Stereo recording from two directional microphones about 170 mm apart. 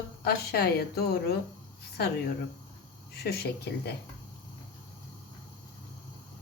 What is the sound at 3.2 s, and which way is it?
Speech, 70° left (ahead or behind).